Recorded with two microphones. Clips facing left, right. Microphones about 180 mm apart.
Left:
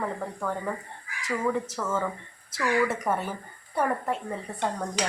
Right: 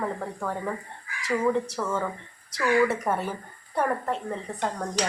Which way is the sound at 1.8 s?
10° right (ahead or behind).